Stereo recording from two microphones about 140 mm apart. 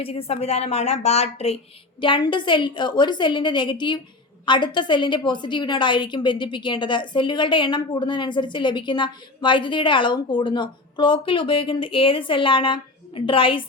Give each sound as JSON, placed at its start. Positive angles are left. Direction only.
{"t": 0.0, "sound": "a woman's voice", "side_deg": 45}